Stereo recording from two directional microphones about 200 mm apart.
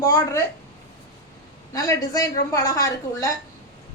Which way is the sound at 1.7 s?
15° left (ahead or behind).